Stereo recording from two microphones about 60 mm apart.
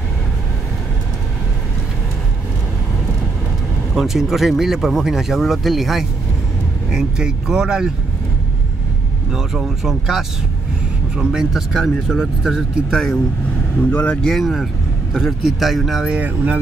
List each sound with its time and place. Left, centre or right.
3.9 s speech: centre
9.3 s speech: centre
12.9 s speech: centre
13.7 s speech: left
14.2 s speech: centre
16.1 s speech: right